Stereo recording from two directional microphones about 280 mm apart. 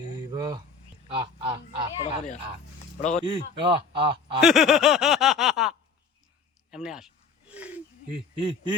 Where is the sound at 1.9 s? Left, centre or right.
Centre.